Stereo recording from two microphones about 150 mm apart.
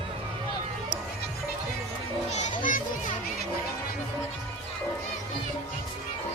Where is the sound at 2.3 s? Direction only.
50° left (ahead or behind).